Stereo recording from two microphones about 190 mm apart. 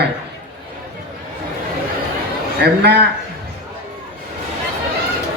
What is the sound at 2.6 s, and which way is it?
Speech, 60° right (ahead or behind).